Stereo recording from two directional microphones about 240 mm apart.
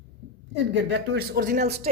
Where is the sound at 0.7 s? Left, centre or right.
Right.